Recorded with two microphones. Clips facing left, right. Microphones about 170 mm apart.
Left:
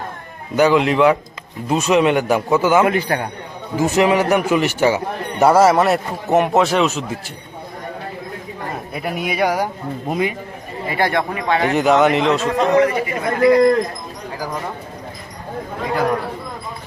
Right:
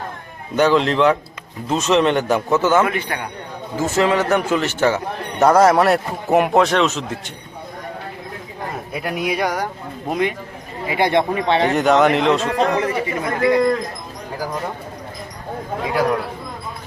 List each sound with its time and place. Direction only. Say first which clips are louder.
0.5 s a man's voice: left 1 dB; 10° left (ahead or behind)
2.8 s a man's voice: left 5 dB; 35° left (ahead or behind)
3.8 s a man's voice: left 2 dB; 15° left (ahead or behind)
8.9 s speech: right 2 dB; centre (ahead or behind)
10.8 s speech: right 2 dB; 20° right (ahead or behind)
11.7 s speech: left 2 dB; centre (ahead or behind)
12.4 s speech: left 4 dB; 30° right (ahead or behind)
13.4 s a man's voice: left 4 dB; 35° left (ahead or behind)